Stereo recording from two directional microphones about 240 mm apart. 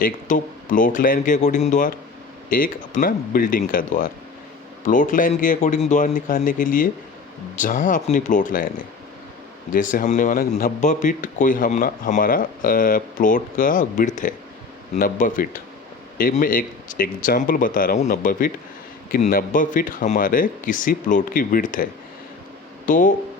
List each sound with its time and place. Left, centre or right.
0.0 s a man's voice: left
22.9 s a man's voice: left